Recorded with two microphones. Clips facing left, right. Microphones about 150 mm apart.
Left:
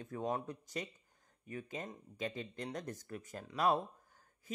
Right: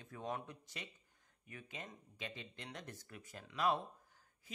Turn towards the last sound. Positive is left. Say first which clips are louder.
# left 4 dB
turn(degrees=45)  # may be behind; listen again after turning